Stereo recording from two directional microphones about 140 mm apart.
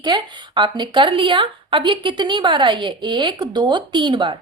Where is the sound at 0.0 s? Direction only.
35° right (ahead or behind).